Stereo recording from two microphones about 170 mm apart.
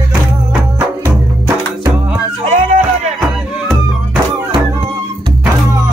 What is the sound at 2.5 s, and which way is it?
Music, 45° right (ahead or behind).